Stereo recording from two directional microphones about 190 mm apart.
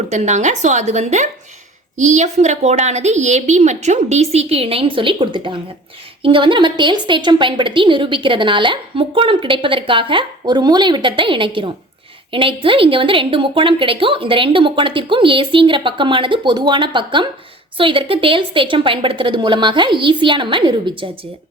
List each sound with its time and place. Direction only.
0.1 s a woman's voice: 35° right (ahead or behind)